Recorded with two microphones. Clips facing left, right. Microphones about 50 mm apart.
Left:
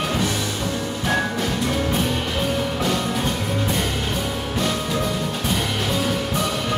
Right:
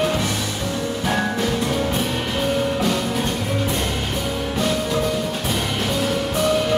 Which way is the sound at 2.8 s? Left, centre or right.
Centre.